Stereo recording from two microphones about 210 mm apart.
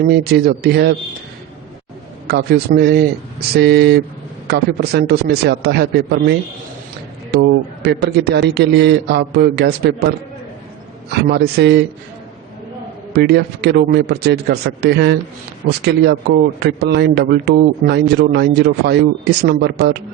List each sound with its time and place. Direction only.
0.1 s a man's voice: 50° right (ahead or behind)
2.2 s a man's voice: 50° right (ahead or behind)
7.4 s a man's voice: 55° right (ahead or behind)
11.3 s a man's voice: 50° right (ahead or behind)
13.1 s a man's voice: 50° right (ahead or behind)